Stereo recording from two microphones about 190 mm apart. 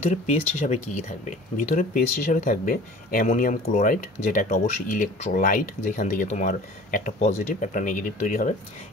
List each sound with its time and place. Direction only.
0.0 s speech: 35° left (ahead or behind)